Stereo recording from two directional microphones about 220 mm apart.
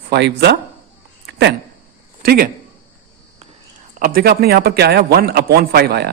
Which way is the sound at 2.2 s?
45° right (ahead or behind).